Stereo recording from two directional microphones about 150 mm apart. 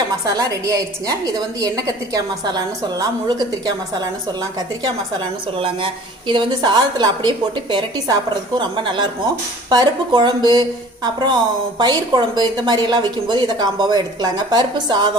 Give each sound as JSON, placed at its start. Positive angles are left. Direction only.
{"t": 0.3, "sound": "a woman's voice", "side_deg": -25}